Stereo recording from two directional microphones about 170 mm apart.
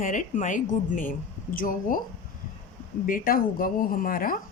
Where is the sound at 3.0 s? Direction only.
60° left (ahead or behind).